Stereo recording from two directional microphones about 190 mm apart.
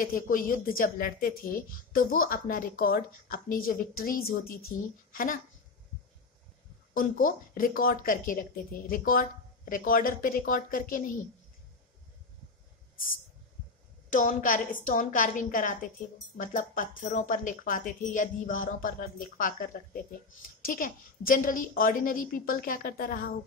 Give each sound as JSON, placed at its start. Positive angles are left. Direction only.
{"t": 0.0, "sound": "speech", "side_deg": 45}
{"t": 6.9, "sound": "speech", "side_deg": 45}
{"t": 14.1, "sound": "speech", "side_deg": 45}